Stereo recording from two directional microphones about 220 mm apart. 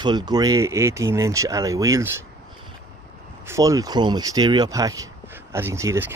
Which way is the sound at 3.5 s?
15° right (ahead or behind).